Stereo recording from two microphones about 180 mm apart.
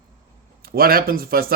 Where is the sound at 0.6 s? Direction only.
55° right (ahead or behind).